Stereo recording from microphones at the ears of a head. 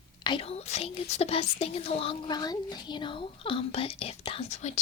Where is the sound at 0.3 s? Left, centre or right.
Left.